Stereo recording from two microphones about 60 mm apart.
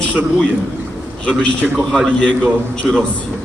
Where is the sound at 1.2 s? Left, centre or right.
Left.